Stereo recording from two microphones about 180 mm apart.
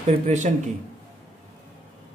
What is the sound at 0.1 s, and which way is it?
Speech, 40° right (ahead or behind).